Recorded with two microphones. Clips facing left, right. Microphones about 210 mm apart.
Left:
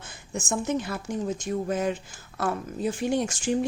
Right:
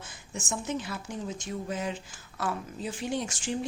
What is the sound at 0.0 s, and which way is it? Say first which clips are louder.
Speech: left 5 dB; 50° left (ahead or behind).